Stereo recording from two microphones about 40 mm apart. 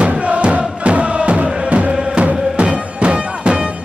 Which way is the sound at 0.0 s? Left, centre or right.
Right.